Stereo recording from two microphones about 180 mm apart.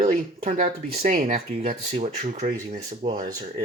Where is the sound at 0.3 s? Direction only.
40° right (ahead or behind).